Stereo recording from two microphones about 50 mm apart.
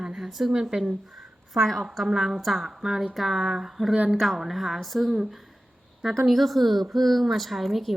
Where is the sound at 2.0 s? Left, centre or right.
Centre.